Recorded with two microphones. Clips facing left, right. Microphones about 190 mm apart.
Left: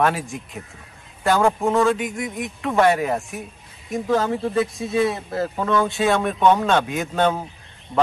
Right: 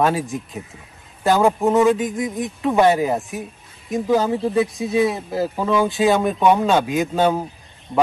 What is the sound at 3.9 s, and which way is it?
Speech, centre (ahead or behind).